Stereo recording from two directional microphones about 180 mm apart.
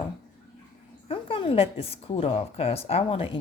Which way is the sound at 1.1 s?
30° left (ahead or behind).